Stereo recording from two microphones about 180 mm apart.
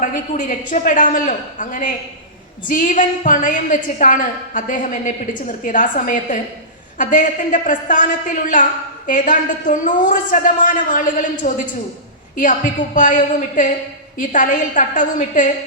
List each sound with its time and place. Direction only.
0.0 s a woman's voice: 45° left (ahead or behind)